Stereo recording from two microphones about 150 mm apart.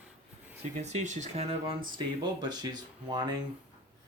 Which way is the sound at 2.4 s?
30° right (ahead or behind).